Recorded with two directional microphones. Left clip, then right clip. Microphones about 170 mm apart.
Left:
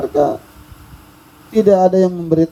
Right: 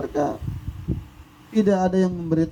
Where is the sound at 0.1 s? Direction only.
45° left (ahead or behind).